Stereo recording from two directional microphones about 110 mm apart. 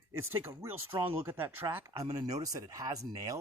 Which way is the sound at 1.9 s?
35° right (ahead or behind).